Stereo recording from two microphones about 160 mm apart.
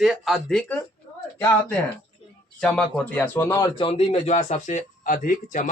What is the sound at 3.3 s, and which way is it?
Speech, 20° left (ahead or behind).